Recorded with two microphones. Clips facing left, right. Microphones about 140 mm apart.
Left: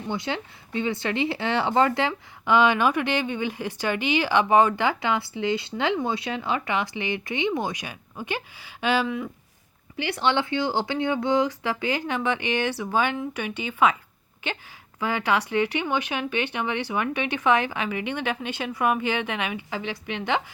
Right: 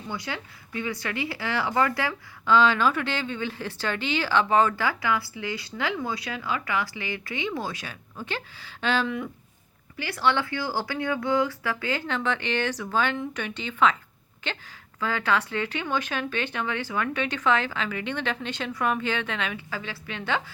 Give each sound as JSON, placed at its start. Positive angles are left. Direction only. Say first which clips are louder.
{"t": 0.1, "sound": "speech", "louder": "left 5 dB", "side_deg": 25}
{"t": 10.0, "sound": "speech", "louder": "left 1 dB", "side_deg": 20}